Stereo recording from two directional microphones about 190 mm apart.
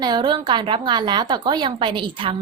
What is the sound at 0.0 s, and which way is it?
A woman's voice, 25° right (ahead or behind).